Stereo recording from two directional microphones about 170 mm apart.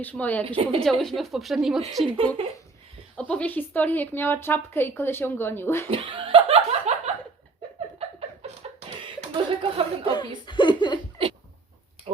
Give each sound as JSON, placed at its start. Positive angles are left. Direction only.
{"t": 0.0, "sound": "speech", "side_deg": 10}
{"t": 0.4, "sound": "speech", "side_deg": -35}
{"t": 0.8, "sound": "speech", "side_deg": 0}
{"t": 2.1, "sound": "speech", "side_deg": -35}
{"t": 3.2, "sound": "speech", "side_deg": 5}
{"t": 5.9, "sound": "laughter", "side_deg": -30}
{"t": 9.0, "sound": "chuckle", "side_deg": -30}
{"t": 10.4, "sound": "laughter", "side_deg": 30}
{"t": 12.1, "sound": "pig", "side_deg": -35}